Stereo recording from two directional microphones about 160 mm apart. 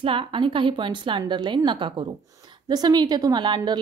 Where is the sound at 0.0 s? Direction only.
30° right (ahead or behind).